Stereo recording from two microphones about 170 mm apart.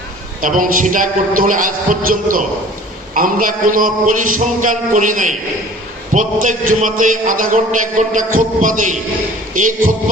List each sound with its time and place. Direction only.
0.4 s a man's voice: 50° right (ahead or behind)